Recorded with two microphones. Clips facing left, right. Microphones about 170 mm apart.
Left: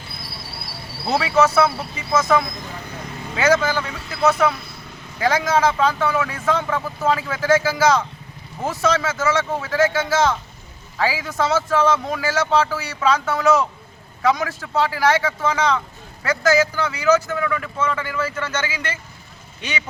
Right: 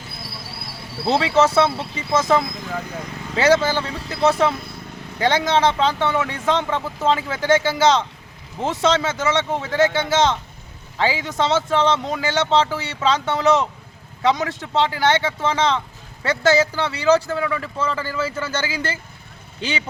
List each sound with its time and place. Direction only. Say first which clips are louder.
1.0 s speech: right 1 dB; 30° right (ahead or behind)